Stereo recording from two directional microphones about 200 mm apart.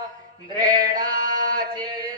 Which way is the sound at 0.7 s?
20° right (ahead or behind).